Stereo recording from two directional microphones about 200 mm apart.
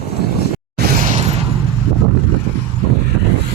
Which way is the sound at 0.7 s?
45° right (ahead or behind).